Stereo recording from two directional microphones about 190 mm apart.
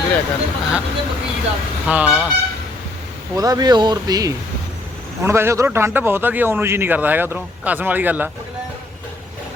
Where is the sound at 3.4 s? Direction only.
20° right (ahead or behind).